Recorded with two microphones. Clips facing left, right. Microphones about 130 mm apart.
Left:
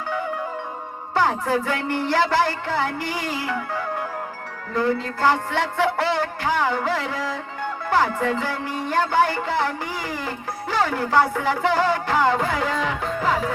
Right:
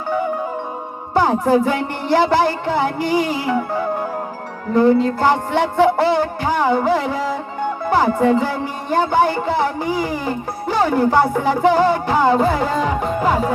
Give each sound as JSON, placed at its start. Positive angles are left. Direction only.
{"t": 1.1, "sound": "music", "side_deg": -15}